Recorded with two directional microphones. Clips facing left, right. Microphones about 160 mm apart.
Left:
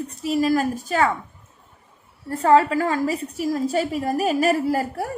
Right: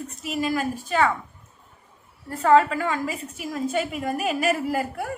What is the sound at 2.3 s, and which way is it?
A woman's voice, 35° left (ahead or behind).